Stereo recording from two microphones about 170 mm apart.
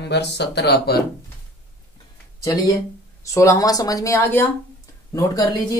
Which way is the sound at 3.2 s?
20° left (ahead or behind).